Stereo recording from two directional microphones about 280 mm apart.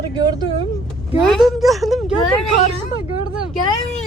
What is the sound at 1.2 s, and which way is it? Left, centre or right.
Speech, centre.